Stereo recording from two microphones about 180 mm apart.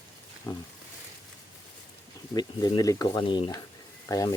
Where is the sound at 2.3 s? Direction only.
20° left (ahead or behind).